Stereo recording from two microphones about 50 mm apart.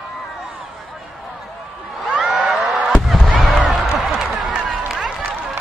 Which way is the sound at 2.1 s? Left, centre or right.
Centre.